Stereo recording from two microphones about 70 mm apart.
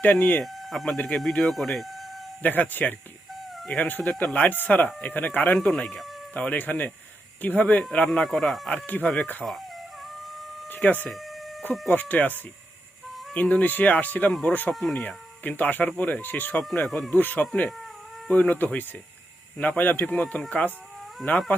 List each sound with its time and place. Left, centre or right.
0.0 s speech: left
0.4 s speech: centre
0.9 s speech: centre
2.4 s speech: left
5.6 s speech: centre
6.3 s speech: left
8.3 s speech: centre
8.7 s speech: left
9.4 s speech: centre
10.7 s speech: left
14.7 s speech: centre
14.9 s speech: left
16.7 s speech: centre
17.1 s speech: left